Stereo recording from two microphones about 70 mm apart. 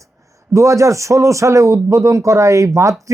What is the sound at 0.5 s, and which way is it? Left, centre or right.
Speech, right.